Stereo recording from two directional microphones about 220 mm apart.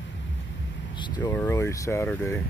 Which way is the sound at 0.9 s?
20° left (ahead or behind).